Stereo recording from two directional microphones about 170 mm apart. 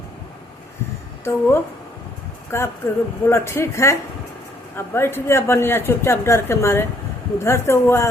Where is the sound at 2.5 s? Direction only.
15° left (ahead or behind).